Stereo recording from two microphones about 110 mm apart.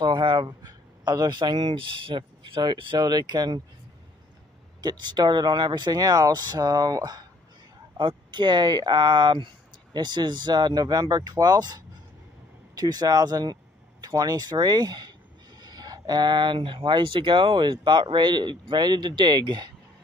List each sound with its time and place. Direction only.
0.0 s speech: 45° right (ahead or behind)
4.8 s speech: 40° right (ahead or behind)
8.0 s speech: 45° right (ahead or behind)